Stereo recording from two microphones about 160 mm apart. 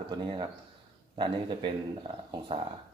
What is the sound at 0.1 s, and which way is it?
Speech, 30° right (ahead or behind).